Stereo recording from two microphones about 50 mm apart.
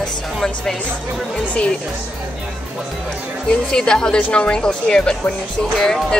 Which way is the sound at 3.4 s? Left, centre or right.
Centre.